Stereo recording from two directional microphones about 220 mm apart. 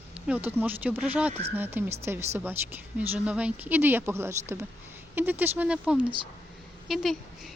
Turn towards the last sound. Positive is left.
turn(degrees=0)  # may be behind; listen again after turning